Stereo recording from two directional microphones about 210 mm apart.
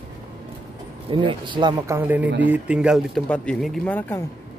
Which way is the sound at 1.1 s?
25° right (ahead or behind).